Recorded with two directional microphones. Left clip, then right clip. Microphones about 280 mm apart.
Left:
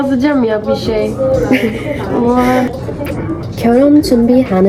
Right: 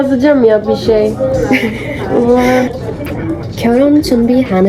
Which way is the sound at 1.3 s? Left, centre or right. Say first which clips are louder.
Even; centre.